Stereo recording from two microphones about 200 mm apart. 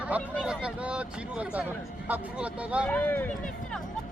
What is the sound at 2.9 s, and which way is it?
Speech, 10° left (ahead or behind).